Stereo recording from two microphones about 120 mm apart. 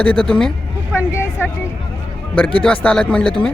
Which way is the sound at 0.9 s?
20° left (ahead or behind).